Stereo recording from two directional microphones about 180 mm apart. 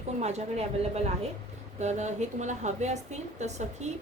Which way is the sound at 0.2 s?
35° right (ahead or behind).